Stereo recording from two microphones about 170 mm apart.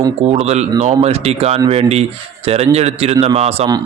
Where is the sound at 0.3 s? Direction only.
40° right (ahead or behind).